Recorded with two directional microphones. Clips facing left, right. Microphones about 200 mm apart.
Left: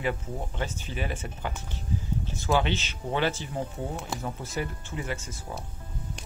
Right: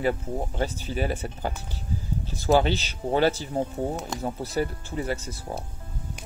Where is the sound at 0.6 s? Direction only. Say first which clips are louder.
Right 6 dB; 35° right (ahead or behind).